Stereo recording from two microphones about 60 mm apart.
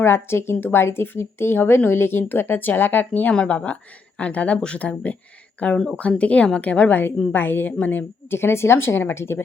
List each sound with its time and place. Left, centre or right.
0.0 s a woman's voice: left
5.7 s speech: centre
6.0 s a woman's voice: left
8.4 s speech: left